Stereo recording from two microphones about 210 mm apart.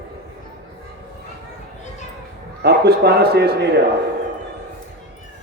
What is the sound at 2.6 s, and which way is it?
A man's voice, 50° right (ahead or behind).